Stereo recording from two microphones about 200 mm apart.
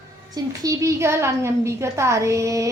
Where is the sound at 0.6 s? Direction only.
15° right (ahead or behind).